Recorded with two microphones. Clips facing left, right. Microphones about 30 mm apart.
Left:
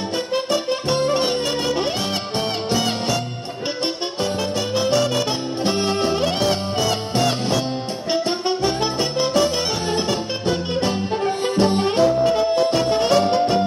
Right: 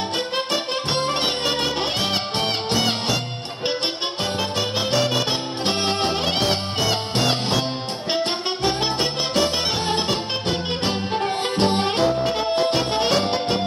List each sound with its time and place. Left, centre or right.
0.3 s music: right
11.4 s music: right